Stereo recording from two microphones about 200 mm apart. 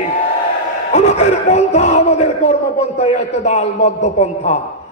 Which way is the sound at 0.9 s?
35° left (ahead or behind).